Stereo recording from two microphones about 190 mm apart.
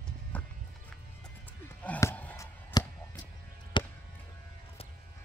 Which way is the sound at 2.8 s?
20° left (ahead or behind).